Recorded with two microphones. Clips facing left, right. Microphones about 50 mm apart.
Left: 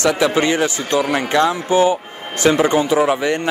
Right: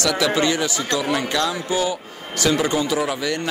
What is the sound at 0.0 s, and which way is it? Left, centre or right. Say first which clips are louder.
A man's voice: left 4 dB; left.